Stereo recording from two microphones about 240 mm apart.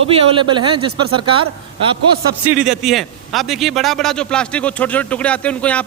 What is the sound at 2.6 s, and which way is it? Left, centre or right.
A man's voice, centre.